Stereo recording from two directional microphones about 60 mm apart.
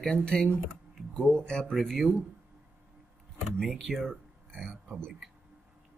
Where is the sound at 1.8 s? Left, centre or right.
Centre.